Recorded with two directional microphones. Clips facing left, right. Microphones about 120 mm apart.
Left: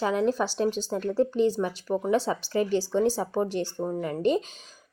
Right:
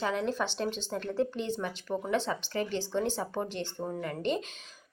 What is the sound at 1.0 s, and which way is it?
Speech, 35° left (ahead or behind).